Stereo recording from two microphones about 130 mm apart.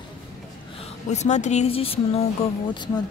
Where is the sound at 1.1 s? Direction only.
60° left (ahead or behind).